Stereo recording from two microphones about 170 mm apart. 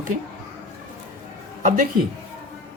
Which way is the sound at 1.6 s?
50° right (ahead or behind).